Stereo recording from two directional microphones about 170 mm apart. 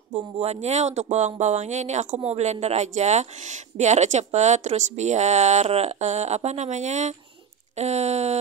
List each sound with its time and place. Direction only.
0.1 s speech: 40° right (ahead or behind)